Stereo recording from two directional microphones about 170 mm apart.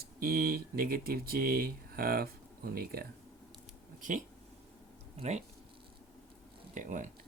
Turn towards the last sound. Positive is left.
turn(degrees=-45)  # may be behind; listen again after turning